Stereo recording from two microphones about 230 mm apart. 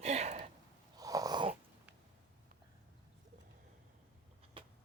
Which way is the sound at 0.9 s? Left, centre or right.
Centre.